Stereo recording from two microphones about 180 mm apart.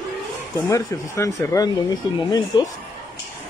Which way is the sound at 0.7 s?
15° left (ahead or behind).